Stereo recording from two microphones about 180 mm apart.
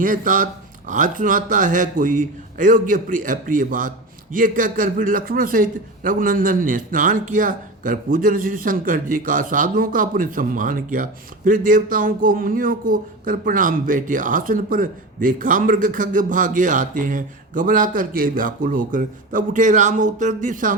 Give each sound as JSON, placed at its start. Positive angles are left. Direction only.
{"t": 0.0, "sound": "a man's voice", "side_deg": -45}